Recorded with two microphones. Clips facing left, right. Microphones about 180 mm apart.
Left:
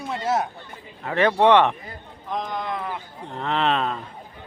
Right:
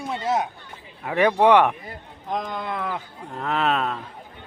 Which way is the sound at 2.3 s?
50° right (ahead or behind).